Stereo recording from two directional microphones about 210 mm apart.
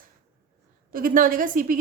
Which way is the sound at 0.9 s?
40° right (ahead or behind).